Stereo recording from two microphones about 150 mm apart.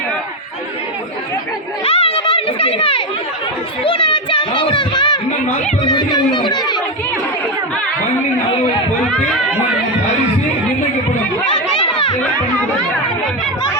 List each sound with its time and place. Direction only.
1.8 s children playing: 40° left (ahead or behind)
3.8 s a child's voice: 35° left (ahead or behind)
9.0 s speech: 5° left (ahead or behind)
11.8 s chatter: 35° left (ahead or behind)